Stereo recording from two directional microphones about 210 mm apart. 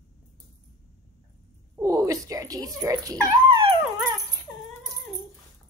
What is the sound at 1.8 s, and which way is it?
Dog, 15° right (ahead or behind).